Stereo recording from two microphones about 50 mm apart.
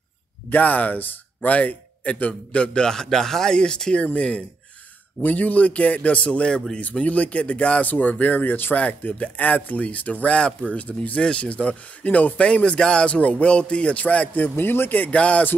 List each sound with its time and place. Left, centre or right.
0.5 s speech: left; by 4.0 s centre
4.0 s speech: left
6.8 s speech: left
12.5 s speech: left
15.0 s speech: left